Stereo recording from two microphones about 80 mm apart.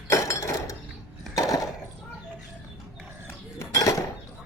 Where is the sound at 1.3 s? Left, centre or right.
Left.